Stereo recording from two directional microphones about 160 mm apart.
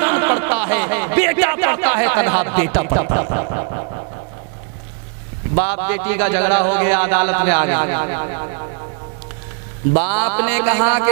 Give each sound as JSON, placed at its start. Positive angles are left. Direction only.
{"t": 0.0, "sound": "a sound", "side_deg": -20}
{"t": 1.2, "sound": "a man's voice", "side_deg": -15}
{"t": 5.6, "sound": "a man's voice", "side_deg": -15}
{"t": 9.9, "sound": "a man's voice", "side_deg": -15}